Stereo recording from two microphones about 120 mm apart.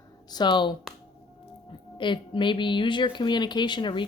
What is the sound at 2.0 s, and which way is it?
Speech, 40° left (ahead or behind).